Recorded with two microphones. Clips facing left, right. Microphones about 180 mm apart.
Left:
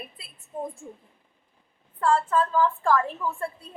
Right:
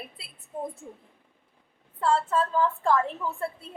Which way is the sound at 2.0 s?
25° right (ahead or behind).